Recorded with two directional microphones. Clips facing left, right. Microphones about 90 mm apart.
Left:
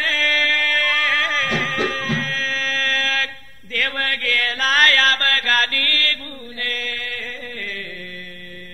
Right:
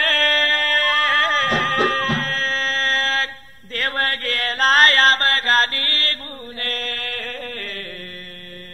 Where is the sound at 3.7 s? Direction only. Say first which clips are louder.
Right 1 dB; 40° right (ahead or behind).